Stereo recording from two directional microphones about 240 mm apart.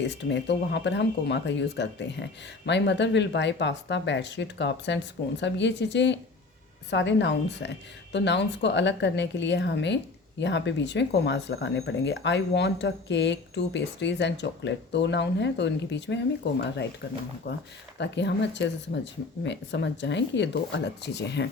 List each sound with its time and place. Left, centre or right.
0.0 s speech: left